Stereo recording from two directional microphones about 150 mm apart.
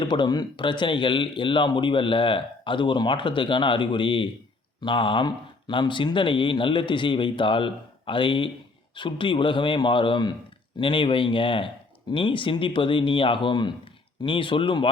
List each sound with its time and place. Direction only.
0.0 s speech: 30° left (ahead or behind)